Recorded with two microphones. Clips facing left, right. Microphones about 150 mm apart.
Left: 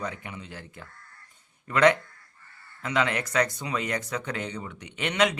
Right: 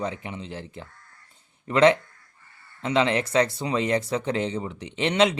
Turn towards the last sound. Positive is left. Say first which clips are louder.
# right 4 dB
turn(degrees=-30)  # may be behind; listen again after turning